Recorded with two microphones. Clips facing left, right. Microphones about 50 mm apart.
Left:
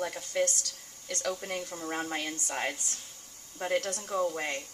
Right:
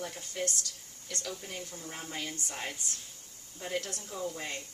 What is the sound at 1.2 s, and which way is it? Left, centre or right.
A woman's voice, left.